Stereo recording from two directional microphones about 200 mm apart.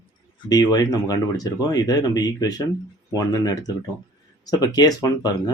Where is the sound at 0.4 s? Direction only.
20° left (ahead or behind).